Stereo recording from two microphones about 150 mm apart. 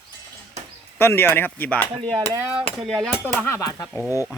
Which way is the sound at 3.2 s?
15° left (ahead or behind).